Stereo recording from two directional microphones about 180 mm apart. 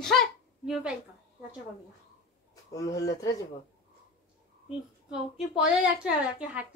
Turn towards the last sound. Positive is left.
turn(degrees=-5)  # may be behind; listen again after turning